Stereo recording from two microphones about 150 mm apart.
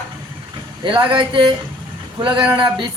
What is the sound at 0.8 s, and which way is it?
Speech, 35° right (ahead or behind).